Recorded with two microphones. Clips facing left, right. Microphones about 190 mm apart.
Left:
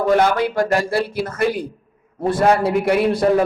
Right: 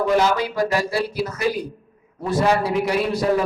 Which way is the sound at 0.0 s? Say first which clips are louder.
Left 3 dB; 55° left (ahead or behind).